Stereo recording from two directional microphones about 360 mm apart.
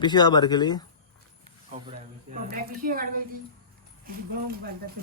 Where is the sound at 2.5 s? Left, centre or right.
Right.